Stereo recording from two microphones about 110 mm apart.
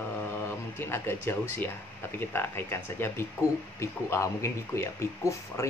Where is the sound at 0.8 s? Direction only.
20° left (ahead or behind).